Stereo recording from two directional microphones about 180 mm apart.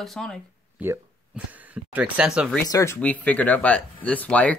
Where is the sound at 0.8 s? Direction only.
10° right (ahead or behind).